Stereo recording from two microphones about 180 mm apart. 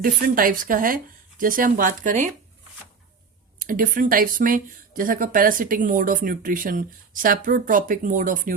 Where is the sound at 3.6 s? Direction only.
50° right (ahead or behind).